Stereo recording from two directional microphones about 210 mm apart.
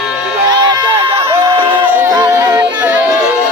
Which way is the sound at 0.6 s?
20° right (ahead or behind).